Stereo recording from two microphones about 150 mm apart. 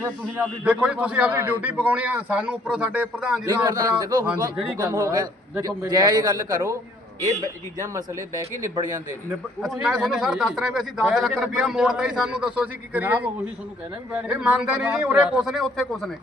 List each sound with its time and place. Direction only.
0.6 s a man's voice: 10° right (ahead or behind)
3.4 s a man's voice: 25° right (ahead or behind)
9.6 s a man's voice: centre (ahead or behind)